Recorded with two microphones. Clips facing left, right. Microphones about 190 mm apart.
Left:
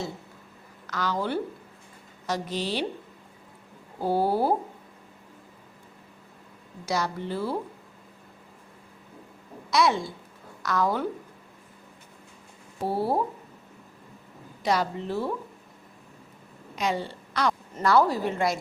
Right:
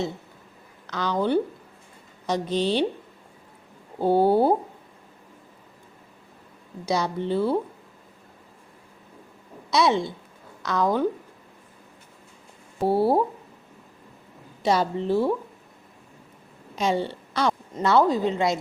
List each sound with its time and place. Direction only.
0.9 s a woman's voice: 20° right (ahead or behind)
4.0 s a woman's voice: 25° right (ahead or behind)
6.8 s a woman's voice: 20° right (ahead or behind)
9.7 s a woman's voice: 20° right (ahead or behind)
12.8 s a woman's voice: 30° right (ahead or behind)
14.6 s a woman's voice: 25° right (ahead or behind)
16.7 s a woman's voice: 25° right (ahead or behind)